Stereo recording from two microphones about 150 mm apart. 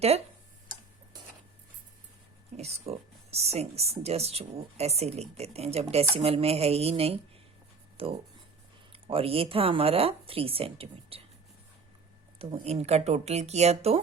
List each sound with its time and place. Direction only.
0.0 s speech: 45° right (ahead or behind)
2.6 s speech: 45° right (ahead or behind)
12.4 s speech: 40° right (ahead or behind)